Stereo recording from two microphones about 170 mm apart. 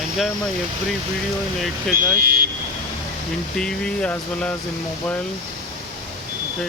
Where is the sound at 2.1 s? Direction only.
55° right (ahead or behind).